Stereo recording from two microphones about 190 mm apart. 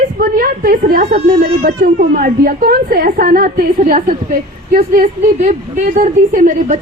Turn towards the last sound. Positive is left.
turn(degrees=-45)  # may be behind; listen again after turning